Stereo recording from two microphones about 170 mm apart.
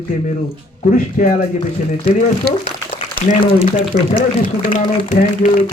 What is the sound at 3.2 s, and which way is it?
Speech, 50° left (ahead or behind).